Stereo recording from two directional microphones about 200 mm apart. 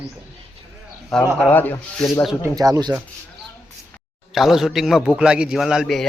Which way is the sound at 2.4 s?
15° right (ahead or behind).